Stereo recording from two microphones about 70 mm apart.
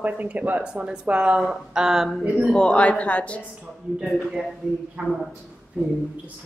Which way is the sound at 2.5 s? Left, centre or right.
Centre.